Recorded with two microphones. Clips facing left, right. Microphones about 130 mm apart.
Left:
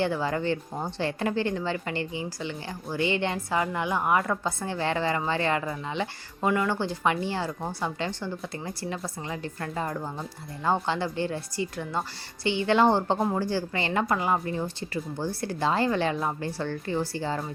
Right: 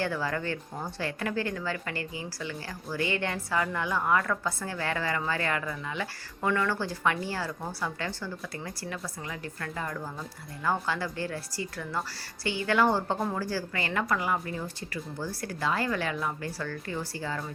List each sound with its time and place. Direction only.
0.0 s a woman's voice: 20° left (ahead or behind)